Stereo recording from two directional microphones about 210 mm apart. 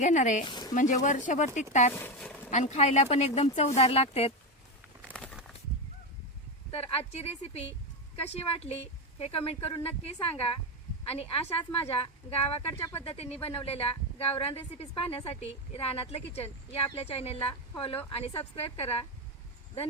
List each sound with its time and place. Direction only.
0.0 s speech: 35° left (ahead or behind)
0.4 s speech: 20° left (ahead or behind)
0.7 s speech: 35° left (ahead or behind)
2.0 s a sound: 5° left (ahead or behind)
2.5 s speech: 35° left (ahead or behind)
5.1 s a sound: centre (ahead or behind)
6.7 s speech: 30° left (ahead or behind)
12.8 s speech: 10° left (ahead or behind)
13.1 s speech: 30° left (ahead or behind)